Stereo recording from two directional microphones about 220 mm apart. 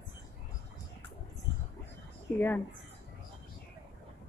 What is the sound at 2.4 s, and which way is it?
Speech, 10° left (ahead or behind).